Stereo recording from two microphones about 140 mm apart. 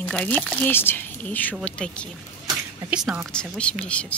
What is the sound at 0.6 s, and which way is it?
Speech, 15° left (ahead or behind).